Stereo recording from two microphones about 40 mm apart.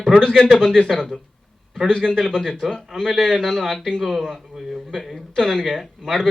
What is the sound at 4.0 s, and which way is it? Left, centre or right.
Speech, centre.